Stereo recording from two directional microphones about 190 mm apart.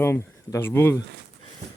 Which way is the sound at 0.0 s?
15° left (ahead or behind).